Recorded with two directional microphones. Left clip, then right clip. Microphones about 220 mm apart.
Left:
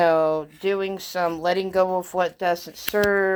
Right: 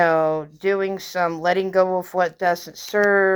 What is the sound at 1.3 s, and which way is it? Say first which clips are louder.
Speech: right 3 dB; 10° right (ahead or behind).